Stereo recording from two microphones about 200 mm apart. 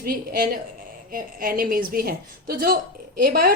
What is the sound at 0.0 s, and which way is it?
A woman's voice, 50° right (ahead or behind).